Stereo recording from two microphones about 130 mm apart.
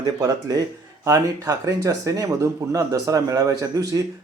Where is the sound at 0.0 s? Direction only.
30° right (ahead or behind).